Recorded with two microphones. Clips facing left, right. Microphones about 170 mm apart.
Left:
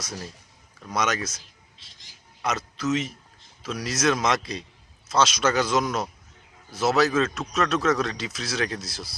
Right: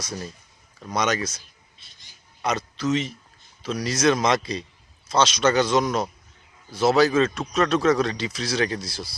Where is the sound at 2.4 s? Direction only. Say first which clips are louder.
Right 2 dB; 5° left (ahead or behind).